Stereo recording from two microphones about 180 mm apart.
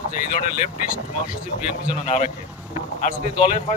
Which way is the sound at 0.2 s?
50° left (ahead or behind).